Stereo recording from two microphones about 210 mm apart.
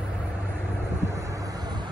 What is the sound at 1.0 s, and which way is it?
Vehicle, 15° right (ahead or behind).